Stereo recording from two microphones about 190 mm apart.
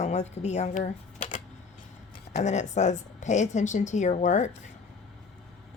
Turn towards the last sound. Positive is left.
turn(degrees=40)  # may be behind; listen again after turning